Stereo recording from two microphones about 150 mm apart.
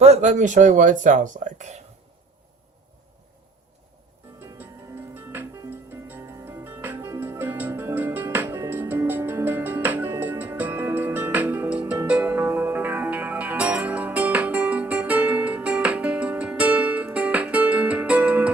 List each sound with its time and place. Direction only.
0.0 s speech: 45° right (ahead or behind)
5.1 s music: 15° right (ahead or behind)